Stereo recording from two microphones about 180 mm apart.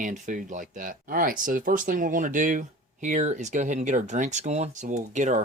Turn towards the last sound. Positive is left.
turn(degrees=-40)  # may be behind; listen again after turning